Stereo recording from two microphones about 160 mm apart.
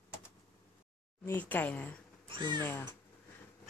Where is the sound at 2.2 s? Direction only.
30° right (ahead or behind).